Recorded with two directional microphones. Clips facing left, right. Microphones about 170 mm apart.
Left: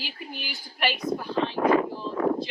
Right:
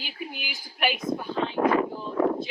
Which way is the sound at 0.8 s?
Centre (ahead or behind).